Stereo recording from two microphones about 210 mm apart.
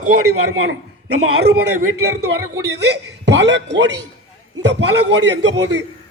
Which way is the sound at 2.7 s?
55° right (ahead or behind).